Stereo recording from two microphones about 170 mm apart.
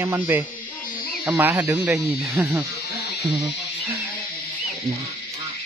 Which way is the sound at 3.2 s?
25° right (ahead or behind).